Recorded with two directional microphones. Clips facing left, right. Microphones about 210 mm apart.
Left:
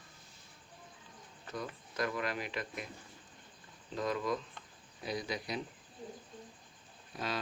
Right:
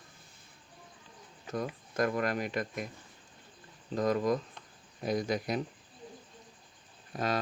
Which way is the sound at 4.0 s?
45° right (ahead or behind).